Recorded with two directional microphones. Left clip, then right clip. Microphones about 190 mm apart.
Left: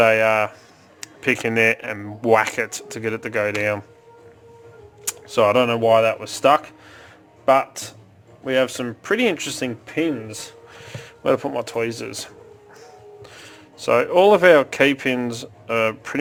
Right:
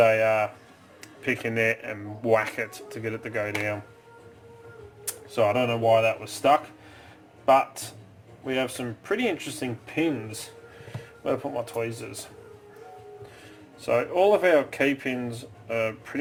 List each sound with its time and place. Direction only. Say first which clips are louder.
0.0 s speech: left 5 dB; 65° left (ahead or behind)
5.3 s speech: left 7 dB; 65° left (ahead or behind)
13.3 s speech: left 6 dB; 55° left (ahead or behind)